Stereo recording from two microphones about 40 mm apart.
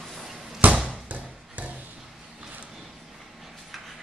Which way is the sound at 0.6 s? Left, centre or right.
Right.